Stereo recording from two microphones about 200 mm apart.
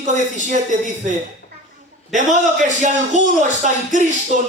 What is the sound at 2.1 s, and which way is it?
Speech, 40° right (ahead or behind).